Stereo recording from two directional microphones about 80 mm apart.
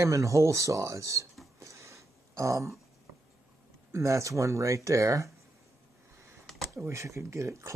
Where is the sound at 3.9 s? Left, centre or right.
Right.